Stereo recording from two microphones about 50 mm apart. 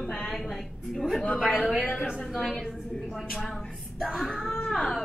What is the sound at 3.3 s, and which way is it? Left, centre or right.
A woman's voice, centre.